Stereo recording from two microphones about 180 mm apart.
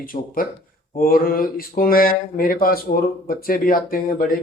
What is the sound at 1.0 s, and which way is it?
A man's voice, 55° left (ahead or behind).